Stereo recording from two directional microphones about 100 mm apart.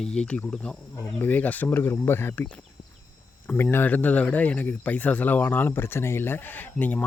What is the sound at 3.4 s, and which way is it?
Speech, 20° left (ahead or behind).